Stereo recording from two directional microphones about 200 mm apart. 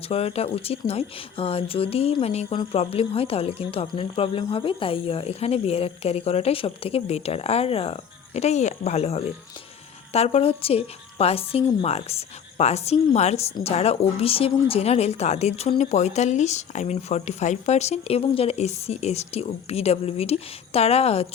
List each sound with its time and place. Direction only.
0.1 s speech: 30° left (ahead or behind)